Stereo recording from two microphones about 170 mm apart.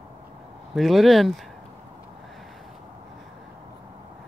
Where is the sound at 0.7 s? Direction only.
Centre (ahead or behind).